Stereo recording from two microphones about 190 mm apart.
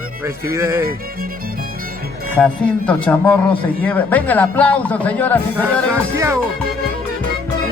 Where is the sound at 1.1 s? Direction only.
50° right (ahead or behind).